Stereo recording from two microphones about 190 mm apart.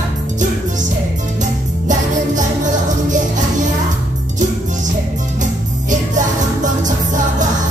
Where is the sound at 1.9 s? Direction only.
40° right (ahead or behind).